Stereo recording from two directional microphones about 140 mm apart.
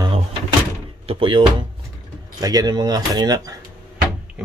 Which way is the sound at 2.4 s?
30° right (ahead or behind).